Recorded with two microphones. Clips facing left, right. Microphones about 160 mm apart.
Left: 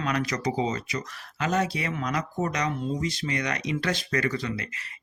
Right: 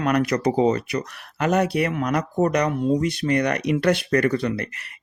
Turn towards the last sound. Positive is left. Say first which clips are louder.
# right 7 dB
turn(degrees=-60)  # may be behind; listen again after turning